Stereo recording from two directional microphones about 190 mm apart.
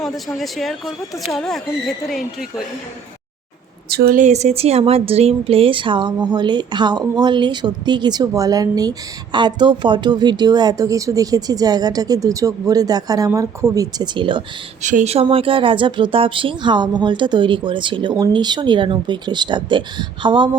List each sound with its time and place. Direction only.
0.0 s speech: centre (ahead or behind)
3.8 s a woman's voice: 55° right (ahead or behind)
4.2 s a woman's voice: 35° right (ahead or behind)
14.8 s a woman's voice: 40° right (ahead or behind)